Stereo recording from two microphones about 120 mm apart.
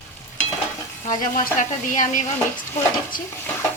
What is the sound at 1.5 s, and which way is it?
Speech, 90° left.